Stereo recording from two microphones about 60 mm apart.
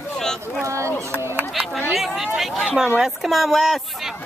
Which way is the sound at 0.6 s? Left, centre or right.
Right.